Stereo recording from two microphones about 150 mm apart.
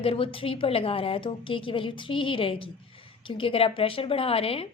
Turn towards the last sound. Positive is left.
turn(degrees=40)  # may be behind; listen again after turning